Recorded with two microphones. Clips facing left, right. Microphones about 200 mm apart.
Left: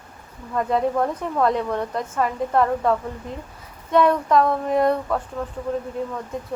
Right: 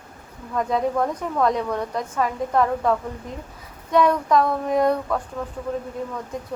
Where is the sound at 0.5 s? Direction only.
5° left (ahead or behind).